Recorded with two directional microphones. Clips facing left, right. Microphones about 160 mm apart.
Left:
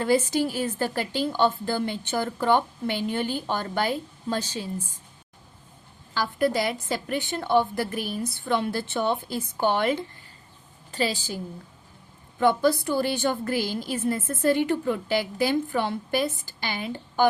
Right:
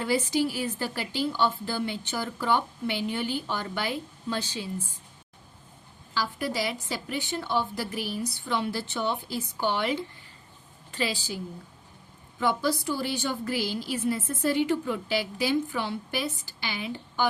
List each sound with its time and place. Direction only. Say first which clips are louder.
0.0 s a woman's voice: left 3 dB; 45° left (ahead or behind)
6.1 s a woman's voice: left 5 dB; 55° left (ahead or behind)
12.4 s a woman's voice: left 5 dB; 55° left (ahead or behind)